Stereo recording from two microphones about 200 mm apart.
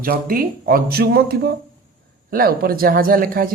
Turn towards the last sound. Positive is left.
turn(degrees=-45)  # may be behind; listen again after turning